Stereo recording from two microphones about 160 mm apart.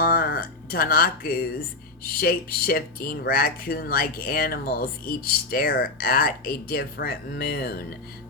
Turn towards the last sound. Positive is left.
turn(degrees=70)  # may be behind; listen again after turning